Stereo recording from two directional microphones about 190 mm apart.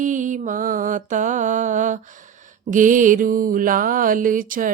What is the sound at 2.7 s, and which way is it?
Mantra, 45° right (ahead or behind).